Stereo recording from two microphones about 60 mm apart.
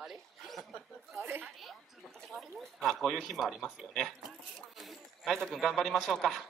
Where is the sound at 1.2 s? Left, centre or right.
Right.